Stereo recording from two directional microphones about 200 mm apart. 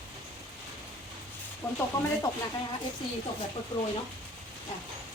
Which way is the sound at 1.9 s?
20° left (ahead or behind).